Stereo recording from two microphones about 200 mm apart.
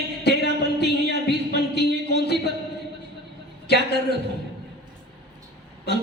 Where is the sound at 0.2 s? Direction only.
55° left (ahead or behind).